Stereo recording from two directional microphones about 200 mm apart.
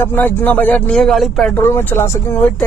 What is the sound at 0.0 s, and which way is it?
Speech, 10° left (ahead or behind).